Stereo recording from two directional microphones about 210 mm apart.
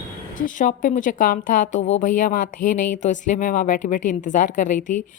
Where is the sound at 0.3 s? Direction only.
40° left (ahead or behind).